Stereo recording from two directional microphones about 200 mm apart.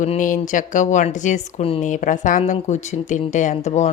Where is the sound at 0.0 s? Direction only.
40° left (ahead or behind).